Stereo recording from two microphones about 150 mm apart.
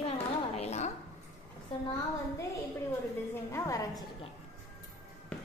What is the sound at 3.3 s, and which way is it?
Speech, 20° left (ahead or behind).